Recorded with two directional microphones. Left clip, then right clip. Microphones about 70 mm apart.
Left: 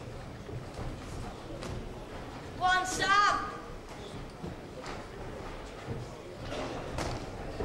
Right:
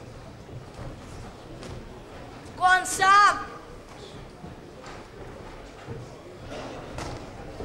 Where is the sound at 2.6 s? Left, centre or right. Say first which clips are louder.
Right 7 dB; right.